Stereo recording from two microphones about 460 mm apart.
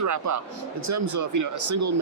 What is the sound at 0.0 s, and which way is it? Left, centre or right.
Speech, right.